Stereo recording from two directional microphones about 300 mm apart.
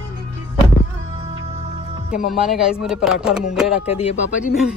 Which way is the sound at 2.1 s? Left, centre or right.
Centre.